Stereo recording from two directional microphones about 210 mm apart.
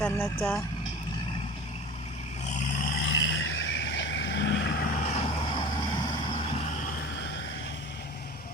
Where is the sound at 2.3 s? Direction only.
35° left (ahead or behind); by 8.1 s 55° left (ahead or behind).